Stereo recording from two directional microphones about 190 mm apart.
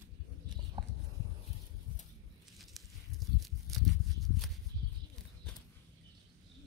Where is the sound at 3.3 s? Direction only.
Centre (ahead or behind).